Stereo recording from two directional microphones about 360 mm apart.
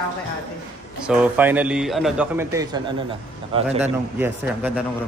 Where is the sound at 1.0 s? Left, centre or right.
Centre.